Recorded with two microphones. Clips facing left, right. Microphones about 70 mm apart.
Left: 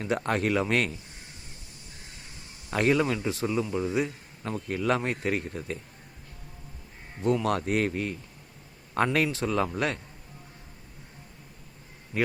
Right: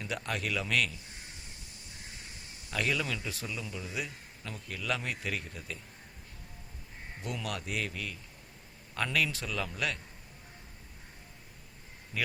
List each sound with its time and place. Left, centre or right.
0.0 s a man's voice: left
2.6 s a man's voice: left
7.2 s speech: left
7.4 s a man's voice: left
12.1 s speech: left